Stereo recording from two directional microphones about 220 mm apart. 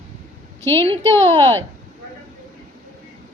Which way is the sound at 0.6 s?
10° left (ahead or behind).